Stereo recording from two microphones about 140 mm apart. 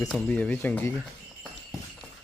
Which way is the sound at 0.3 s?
10° left (ahead or behind).